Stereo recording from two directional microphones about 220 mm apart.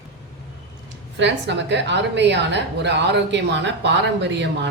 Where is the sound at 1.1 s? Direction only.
55° right (ahead or behind).